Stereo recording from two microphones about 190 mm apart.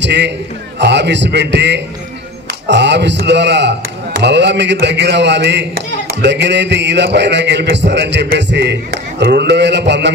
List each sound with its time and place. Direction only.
0.0 s a man's voice: 65° right (ahead or behind)